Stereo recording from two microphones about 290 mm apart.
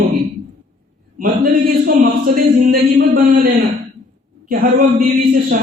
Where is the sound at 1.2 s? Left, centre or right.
Right.